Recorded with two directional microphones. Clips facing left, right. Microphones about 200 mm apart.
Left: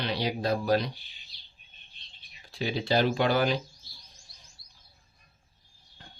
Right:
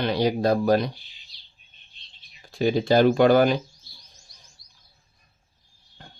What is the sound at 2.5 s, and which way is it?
Speech, 50° right (ahead or behind).